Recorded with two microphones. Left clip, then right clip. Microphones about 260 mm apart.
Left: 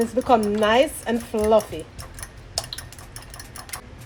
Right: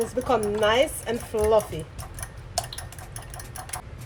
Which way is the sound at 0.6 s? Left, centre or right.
Left.